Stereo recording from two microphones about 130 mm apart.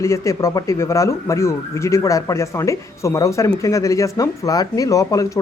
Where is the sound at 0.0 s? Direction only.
20° left (ahead or behind).